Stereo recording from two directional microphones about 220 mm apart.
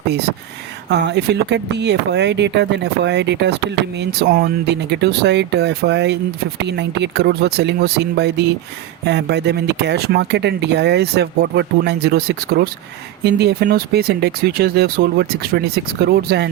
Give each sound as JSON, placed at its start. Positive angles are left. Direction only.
{"t": 0.1, "sound": "speech", "side_deg": -50}